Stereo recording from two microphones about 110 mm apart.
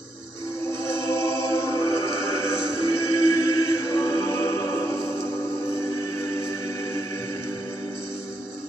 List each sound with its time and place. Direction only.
1.0 s music: 25° left (ahead or behind)